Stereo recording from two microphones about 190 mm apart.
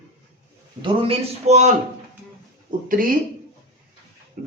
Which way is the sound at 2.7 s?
45° right (ahead or behind).